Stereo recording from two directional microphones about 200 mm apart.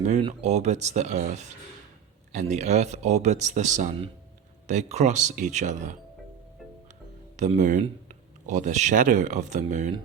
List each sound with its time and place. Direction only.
0.0 s speech: 35° right (ahead or behind)
7.3 s speech: 40° right (ahead or behind)